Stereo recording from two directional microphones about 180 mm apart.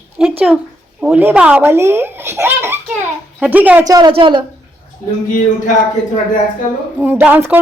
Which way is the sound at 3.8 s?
25° right (ahead or behind).